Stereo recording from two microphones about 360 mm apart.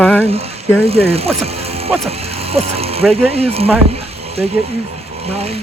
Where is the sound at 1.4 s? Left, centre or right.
Centre.